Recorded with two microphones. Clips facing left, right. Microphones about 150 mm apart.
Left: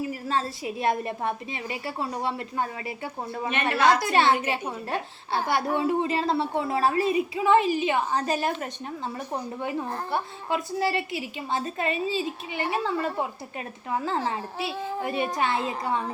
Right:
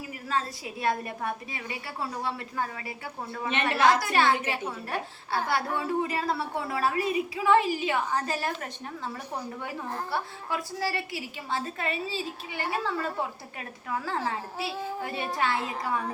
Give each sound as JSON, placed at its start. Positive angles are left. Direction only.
{"t": 0.1, "sound": "a woman's voice", "side_deg": 30}